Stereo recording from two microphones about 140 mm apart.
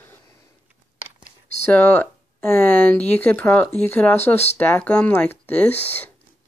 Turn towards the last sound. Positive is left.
turn(degrees=10)  # may be behind; listen again after turning